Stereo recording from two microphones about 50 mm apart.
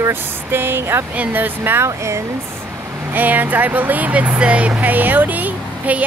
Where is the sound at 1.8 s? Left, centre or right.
Right.